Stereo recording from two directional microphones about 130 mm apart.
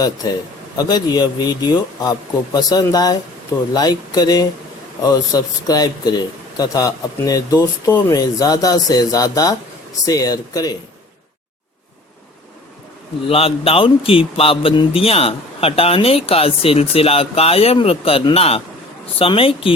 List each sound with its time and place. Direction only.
0.8 s a man's voice: 30° left (ahead or behind)
13.3 s a man's voice: 45° left (ahead or behind)